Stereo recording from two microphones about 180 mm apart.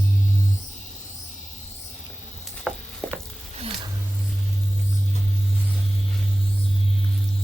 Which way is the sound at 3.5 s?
30° right (ahead or behind).